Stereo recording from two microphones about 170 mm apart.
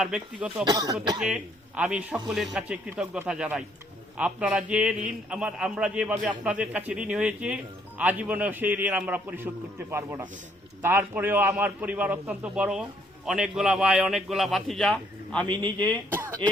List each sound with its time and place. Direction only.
0.0 s a man's voice: 5° right (ahead or behind)
0.6 s speech: 25° right (ahead or behind)
1.2 s a man's voice: 5° right (ahead or behind)